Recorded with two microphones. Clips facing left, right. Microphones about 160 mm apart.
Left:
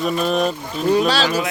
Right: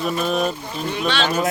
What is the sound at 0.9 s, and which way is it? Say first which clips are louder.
Speech: left 4 dB; 35° left (ahead or behind).